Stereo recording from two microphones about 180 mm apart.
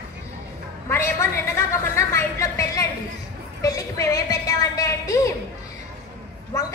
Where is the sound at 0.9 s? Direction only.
15° left (ahead or behind).